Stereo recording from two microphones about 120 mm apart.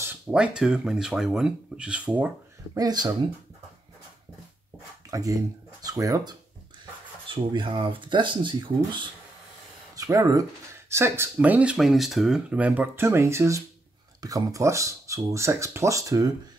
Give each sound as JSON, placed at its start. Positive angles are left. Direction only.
{"t": 0.3, "sound": "speech", "side_deg": -10}
{"t": 2.7, "sound": "speech", "side_deg": -35}
{"t": 5.1, "sound": "speech", "side_deg": -25}
{"t": 7.2, "sound": "speech", "side_deg": -45}
{"t": 9.9, "sound": "speech", "side_deg": -30}